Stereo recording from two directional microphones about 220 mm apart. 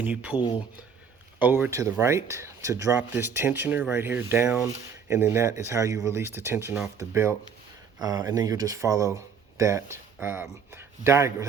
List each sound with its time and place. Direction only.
0.0 s speech: 5° right (ahead or behind)
0.3 s speech: 20° left (ahead or behind)
1.4 s speech: 10° right (ahead or behind)